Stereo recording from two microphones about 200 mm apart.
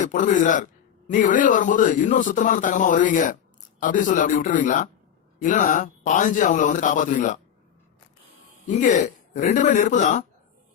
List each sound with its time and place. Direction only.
0.0 s speech: 40° left (ahead or behind)
8.6 s speech: 40° left (ahead or behind)